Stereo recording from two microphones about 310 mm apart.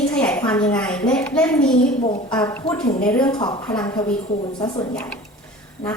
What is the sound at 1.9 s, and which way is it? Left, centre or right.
Speech, centre.